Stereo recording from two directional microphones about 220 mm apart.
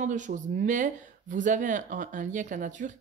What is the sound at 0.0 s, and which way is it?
Speech, 35° right (ahead or behind).